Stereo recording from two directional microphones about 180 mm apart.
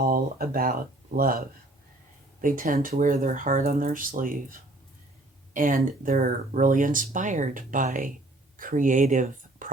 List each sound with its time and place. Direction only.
0.0 s speech: 55° right (ahead or behind)
5.5 s speech: 50° right (ahead or behind)